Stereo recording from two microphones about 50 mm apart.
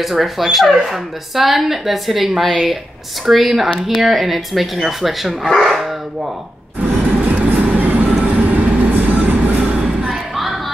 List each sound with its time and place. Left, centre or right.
0.0 s speech: centre
5.6 s dog: centre
6.8 s music: right
8.3 s train: right
10.3 s a sound: centre